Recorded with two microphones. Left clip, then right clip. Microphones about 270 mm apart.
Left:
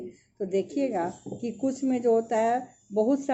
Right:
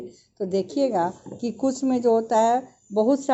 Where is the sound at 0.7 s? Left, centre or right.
Centre.